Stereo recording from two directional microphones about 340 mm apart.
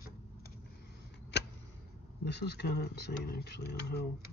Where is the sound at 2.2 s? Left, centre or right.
Left.